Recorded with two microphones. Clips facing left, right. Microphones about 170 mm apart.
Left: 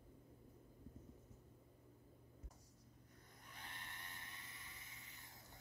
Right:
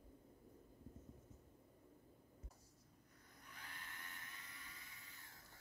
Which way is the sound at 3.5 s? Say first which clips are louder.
Left 1 dB; 25° left (ahead or behind).